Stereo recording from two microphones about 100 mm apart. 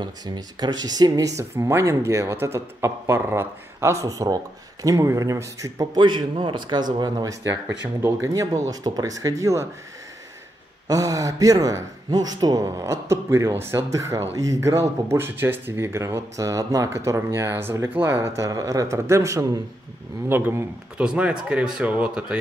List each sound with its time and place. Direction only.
0.0 s speech: 45° right (ahead or behind)
5.9 s speech: 50° right (ahead or behind)
8.0 s speech: 30° right (ahead or behind)
10.9 s speech: 35° right (ahead or behind)
21.0 s speech: 10° right (ahead or behind)